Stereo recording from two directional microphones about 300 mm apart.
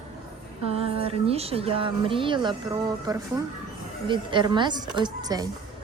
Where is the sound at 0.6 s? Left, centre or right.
Centre.